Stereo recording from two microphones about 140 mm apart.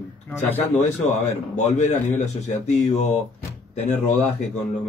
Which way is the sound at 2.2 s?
55° left (ahead or behind).